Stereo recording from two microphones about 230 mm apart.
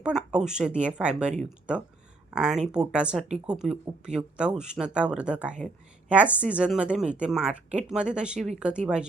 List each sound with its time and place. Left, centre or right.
0.0 s a woman's voice: centre